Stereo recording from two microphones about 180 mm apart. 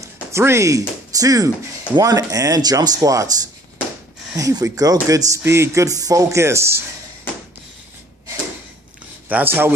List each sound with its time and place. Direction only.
0.0 s speech: 15° right (ahead or behind)
4.4 s speech: 20° right (ahead or behind)
9.3 s speech: 10° right (ahead or behind)